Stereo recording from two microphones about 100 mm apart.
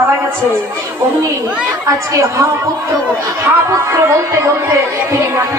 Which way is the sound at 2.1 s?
30° right (ahead or behind).